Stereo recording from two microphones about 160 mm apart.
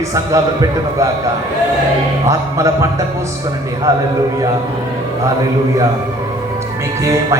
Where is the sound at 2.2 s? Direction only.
20° right (ahead or behind).